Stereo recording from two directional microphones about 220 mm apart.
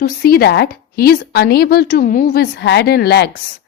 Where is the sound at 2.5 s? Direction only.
50° left (ahead or behind).